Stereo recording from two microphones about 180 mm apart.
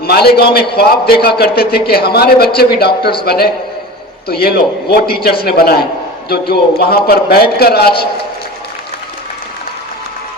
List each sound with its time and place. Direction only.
0.0 s a man's voice: 60° left (ahead or behind)